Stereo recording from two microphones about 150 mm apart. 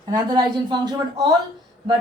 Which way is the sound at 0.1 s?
25° right (ahead or behind).